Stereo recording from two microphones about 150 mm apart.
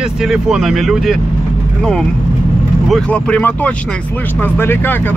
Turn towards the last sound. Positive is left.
turn(degrees=15)  # may be behind; listen again after turning